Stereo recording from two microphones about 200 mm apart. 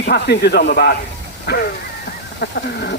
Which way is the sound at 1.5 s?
55° left (ahead or behind).